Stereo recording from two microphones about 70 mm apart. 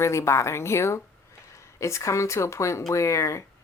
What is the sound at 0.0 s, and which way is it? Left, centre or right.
A woman's voice, left.